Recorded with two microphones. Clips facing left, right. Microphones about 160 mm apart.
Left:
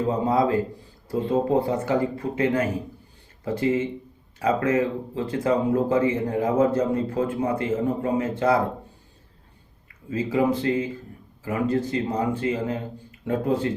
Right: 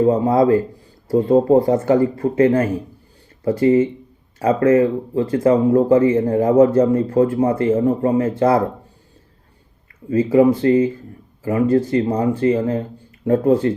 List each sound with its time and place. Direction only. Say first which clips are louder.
0.0 s speech: right 7 dB; 40° right (ahead or behind)
10.1 s speech: right 9 dB; 40° right (ahead or behind)
12.0 s speech: right 7 dB; 40° right (ahead or behind)